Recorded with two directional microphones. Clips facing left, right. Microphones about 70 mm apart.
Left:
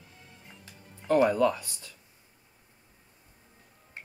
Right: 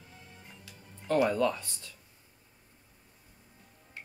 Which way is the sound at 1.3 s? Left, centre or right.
Centre.